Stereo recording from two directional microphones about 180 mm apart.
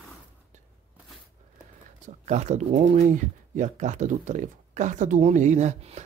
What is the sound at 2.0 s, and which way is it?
Speech, 40° right (ahead or behind).